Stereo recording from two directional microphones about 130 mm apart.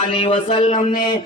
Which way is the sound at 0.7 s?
90° left.